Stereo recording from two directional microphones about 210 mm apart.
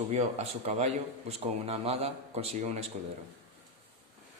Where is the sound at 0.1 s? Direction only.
30° right (ahead or behind).